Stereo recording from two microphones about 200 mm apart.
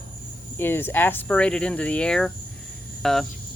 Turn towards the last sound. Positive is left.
turn(degrees=0)  # may be behind; listen again after turning